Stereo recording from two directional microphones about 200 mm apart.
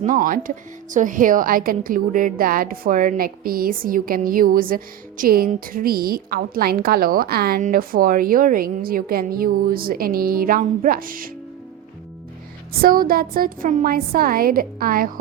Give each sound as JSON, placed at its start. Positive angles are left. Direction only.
{"t": 0.0, "sound": "a woman's voice", "side_deg": -40}
{"t": 12.8, "sound": "a woman's voice", "side_deg": -45}